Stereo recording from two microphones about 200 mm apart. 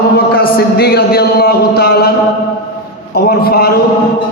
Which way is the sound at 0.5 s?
50° left (ahead or behind).